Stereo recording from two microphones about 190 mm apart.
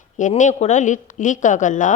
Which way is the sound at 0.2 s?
40° left (ahead or behind).